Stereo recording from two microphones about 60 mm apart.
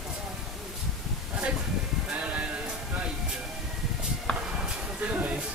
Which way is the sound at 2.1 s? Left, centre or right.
Right.